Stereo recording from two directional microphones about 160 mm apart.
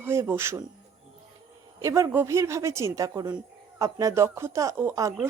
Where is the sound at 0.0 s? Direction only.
15° right (ahead or behind).